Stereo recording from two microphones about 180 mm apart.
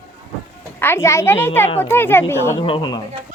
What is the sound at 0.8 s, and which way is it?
Speech, 15° left (ahead or behind).